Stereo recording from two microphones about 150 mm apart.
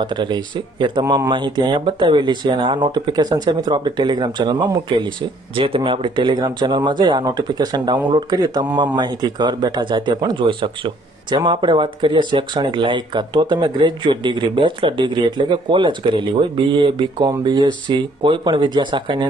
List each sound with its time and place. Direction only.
0.0 s speech: 30° right (ahead or behind)